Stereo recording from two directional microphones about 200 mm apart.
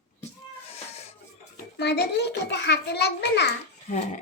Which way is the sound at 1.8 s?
60° left (ahead or behind).